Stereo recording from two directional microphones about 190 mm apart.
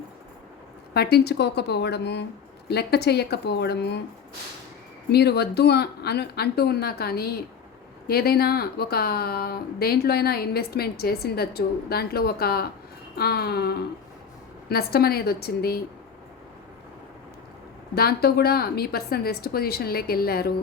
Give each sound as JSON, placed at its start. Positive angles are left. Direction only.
{"t": 0.9, "sound": "speech", "side_deg": 55}
{"t": 5.1, "sound": "speech", "side_deg": 60}
{"t": 17.9, "sound": "speech", "side_deg": 55}